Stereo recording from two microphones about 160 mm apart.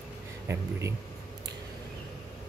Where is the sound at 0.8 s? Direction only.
20° right (ahead or behind).